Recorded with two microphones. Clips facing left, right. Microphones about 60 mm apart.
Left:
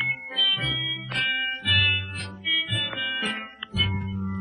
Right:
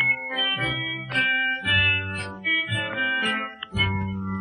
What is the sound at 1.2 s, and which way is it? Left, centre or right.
Music, right.